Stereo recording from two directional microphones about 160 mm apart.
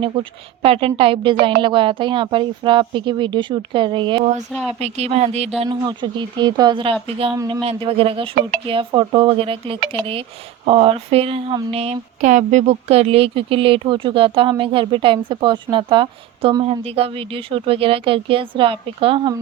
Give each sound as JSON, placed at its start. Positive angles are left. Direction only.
{"t": 0.0, "sound": "a woman's voice", "side_deg": -35}
{"t": 4.8, "sound": "a woman's voice", "side_deg": -40}
{"t": 5.6, "sound": "a woman's voice", "side_deg": -25}